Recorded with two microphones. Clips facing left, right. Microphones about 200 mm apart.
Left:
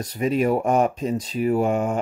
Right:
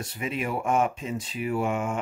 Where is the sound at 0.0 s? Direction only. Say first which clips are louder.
Left 9 dB; 40° left (ahead or behind).